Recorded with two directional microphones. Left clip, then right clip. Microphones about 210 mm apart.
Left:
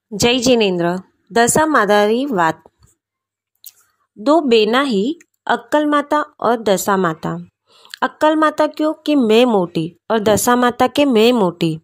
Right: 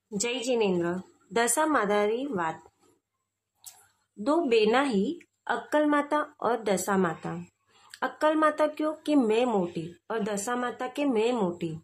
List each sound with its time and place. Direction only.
0.2 s a woman's voice: 45° left (ahead or behind)
4.2 s a woman's voice: 35° left (ahead or behind)